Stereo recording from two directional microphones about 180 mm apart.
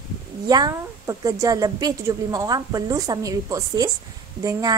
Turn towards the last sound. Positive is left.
turn(degrees=-20)  # may be behind; listen again after turning